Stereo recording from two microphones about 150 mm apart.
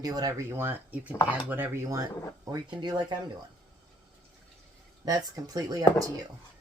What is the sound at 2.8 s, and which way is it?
Speech, 30° right (ahead or behind).